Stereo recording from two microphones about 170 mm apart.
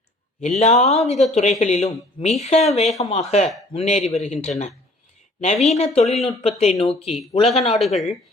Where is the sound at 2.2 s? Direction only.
40° left (ahead or behind).